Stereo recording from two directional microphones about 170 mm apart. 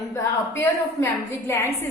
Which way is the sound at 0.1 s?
15° left (ahead or behind).